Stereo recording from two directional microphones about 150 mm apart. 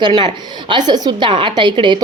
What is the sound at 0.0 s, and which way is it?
A woman's voice, 30° right (ahead or behind).